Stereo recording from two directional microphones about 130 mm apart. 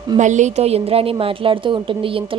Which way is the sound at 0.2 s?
65° right (ahead or behind).